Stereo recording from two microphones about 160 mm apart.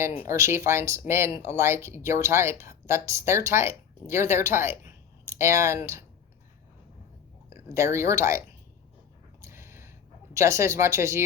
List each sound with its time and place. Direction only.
0.0 s speech: 15° right (ahead or behind)
7.5 s speech: 15° right (ahead or behind)
9.4 s a sound: 15° right (ahead or behind)
10.3 s speech: 15° right (ahead or behind)